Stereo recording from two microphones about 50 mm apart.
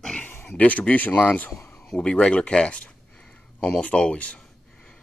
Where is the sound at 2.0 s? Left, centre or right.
Centre.